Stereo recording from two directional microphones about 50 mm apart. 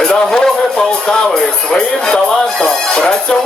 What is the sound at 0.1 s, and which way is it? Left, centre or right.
Music, centre.